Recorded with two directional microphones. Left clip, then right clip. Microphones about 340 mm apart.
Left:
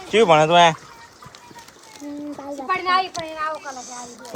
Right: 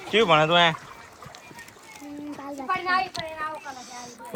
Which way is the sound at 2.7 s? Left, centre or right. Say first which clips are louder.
Left 5 dB; left.